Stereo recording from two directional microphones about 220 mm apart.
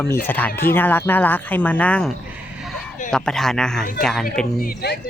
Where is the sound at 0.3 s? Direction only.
10° left (ahead or behind).